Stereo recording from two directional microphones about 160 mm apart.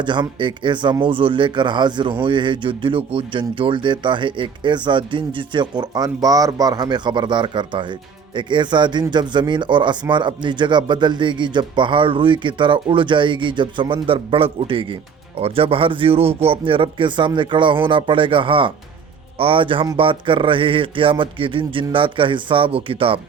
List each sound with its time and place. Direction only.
0.0 s speech: 30° right (ahead or behind)